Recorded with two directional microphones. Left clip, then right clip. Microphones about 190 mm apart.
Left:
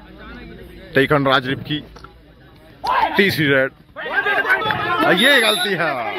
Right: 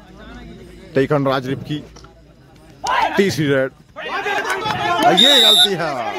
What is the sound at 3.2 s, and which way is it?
Speech, 15° right (ahead or behind).